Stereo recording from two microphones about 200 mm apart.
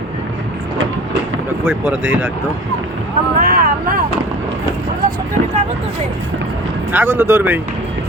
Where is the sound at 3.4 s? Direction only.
45° right (ahead or behind).